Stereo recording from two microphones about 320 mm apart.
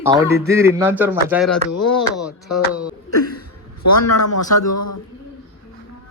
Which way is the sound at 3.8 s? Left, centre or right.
Left.